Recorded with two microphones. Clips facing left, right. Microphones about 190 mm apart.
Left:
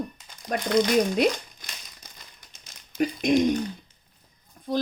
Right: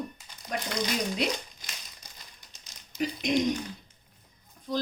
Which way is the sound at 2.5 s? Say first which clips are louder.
Left 14 dB; 55° left (ahead or behind).